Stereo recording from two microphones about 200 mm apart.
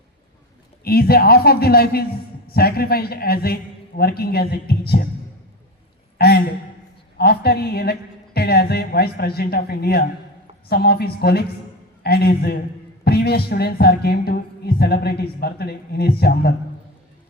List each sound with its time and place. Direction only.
0.9 s speech: 50° left (ahead or behind)
6.1 s speech: 50° left (ahead or behind)